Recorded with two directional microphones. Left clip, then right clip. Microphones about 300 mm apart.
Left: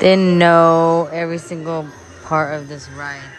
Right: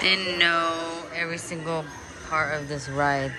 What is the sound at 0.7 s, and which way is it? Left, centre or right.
Speech, centre.